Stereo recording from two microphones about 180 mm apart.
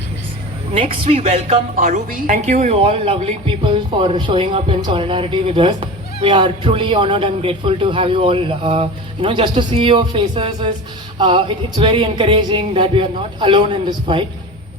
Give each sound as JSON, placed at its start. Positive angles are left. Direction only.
{"t": 0.7, "sound": "a woman's voice", "side_deg": -30}
{"t": 2.7, "sound": "speech", "side_deg": -30}